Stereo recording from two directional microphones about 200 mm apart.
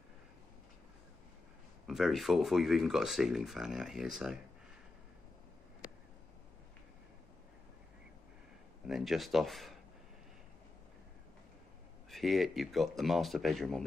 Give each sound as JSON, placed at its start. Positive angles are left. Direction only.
{"t": 1.9, "sound": "speech", "side_deg": 0}
{"t": 8.8, "sound": "speech", "side_deg": 0}
{"t": 12.1, "sound": "speech", "side_deg": 0}